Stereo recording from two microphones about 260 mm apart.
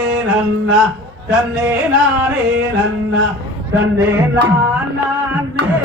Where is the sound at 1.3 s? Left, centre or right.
Centre.